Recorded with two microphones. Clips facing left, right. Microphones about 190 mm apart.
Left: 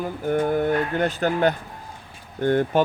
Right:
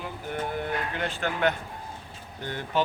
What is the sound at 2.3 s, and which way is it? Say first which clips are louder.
Speech: left 13 dB; 50° left (ahead or behind).